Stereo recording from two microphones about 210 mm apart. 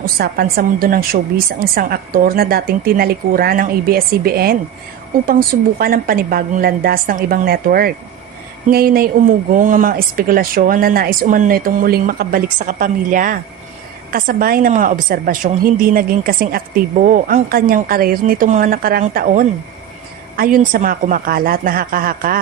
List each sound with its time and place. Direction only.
0.0 s a woman's voice: 45° right (ahead or behind)
5.8 s a woman's voice: 45° right (ahead or behind)